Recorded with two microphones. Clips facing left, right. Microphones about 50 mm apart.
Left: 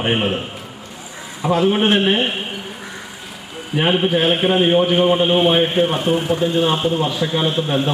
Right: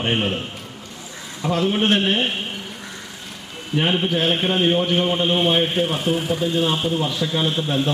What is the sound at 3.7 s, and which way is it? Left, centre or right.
A man's voice, centre.